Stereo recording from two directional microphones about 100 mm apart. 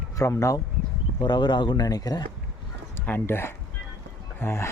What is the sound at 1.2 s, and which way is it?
Speech, 45° left (ahead or behind).